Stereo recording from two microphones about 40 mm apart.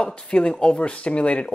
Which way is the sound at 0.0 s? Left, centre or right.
Left.